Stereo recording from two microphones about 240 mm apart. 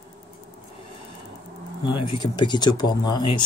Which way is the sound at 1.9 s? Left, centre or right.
Left.